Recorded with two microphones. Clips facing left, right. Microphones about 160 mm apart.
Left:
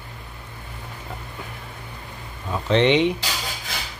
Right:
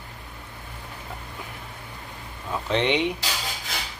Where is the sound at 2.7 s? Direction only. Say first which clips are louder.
Left 6 dB; 10° right (ahead or behind).